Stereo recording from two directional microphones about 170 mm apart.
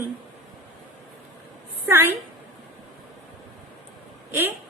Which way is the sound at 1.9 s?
15° right (ahead or behind).